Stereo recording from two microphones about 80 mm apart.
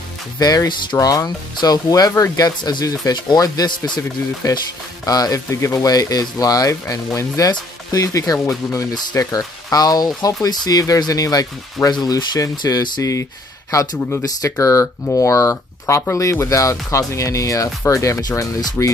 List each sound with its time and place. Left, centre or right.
0.4 s speech: left
0.9 s speech: left
3.6 s a man's voice: left
4.4 s speech: left
5.5 s speech: left
11.9 s speech: left
13.0 s speech: left